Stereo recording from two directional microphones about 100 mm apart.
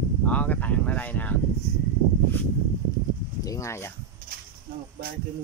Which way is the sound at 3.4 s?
30° left (ahead or behind).